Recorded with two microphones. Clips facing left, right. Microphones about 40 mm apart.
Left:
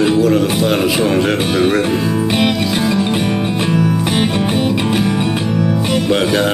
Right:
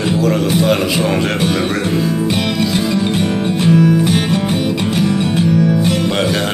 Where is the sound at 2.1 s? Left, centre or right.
Centre.